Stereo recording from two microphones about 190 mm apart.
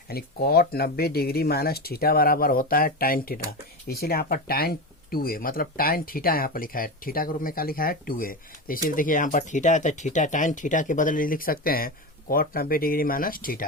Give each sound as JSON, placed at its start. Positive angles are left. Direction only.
{"t": 0.1, "sound": "speech", "side_deg": 55}